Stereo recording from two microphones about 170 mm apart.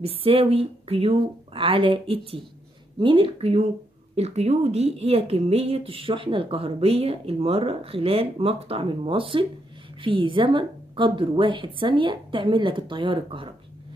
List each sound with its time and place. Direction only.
0.0 s a woman's voice: 35° right (ahead or behind)